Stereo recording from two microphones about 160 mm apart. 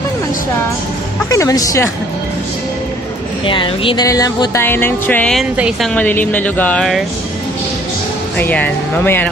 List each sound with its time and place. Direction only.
1.3 s music: 20° left (ahead or behind)
3.4 s music: 30° left (ahead or behind); by 5.5 s 5° left (ahead or behind)
5.6 s a woman's voice: 5° right (ahead or behind)
5.9 s speech: 10° left (ahead or behind)
8.4 s speech: 10° left (ahead or behind)